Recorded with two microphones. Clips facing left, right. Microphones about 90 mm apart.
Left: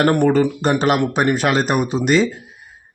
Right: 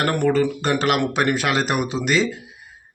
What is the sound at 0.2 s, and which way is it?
Speech, 45° left (ahead or behind).